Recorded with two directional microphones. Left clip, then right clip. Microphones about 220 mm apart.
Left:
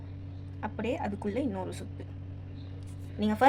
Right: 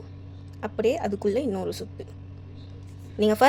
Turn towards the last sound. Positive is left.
turn(degrees=-50)  # may be behind; listen again after turning